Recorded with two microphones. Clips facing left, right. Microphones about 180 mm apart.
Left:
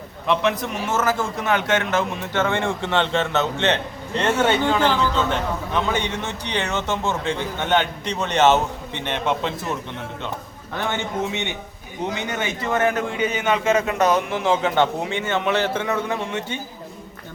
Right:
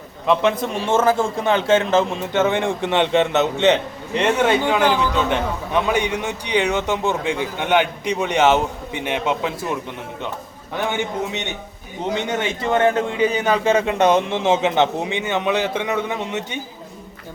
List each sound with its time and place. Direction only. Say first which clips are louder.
0.4 s a man's voice: right 3 dB; 25° right (ahead or behind); by 9.6 s 5° right (ahead or behind)
12.1 s a man's voice: right 4 dB; 25° right (ahead or behind)